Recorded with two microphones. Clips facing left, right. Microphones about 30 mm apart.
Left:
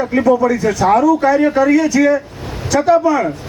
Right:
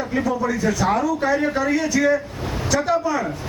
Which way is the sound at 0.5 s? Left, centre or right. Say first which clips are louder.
Left 5 dB; left.